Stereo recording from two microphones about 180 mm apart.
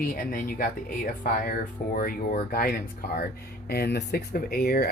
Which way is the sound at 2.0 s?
50° left (ahead or behind).